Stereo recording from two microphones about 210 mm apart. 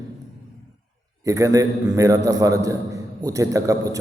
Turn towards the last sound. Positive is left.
turn(degrees=-15)  # may be behind; listen again after turning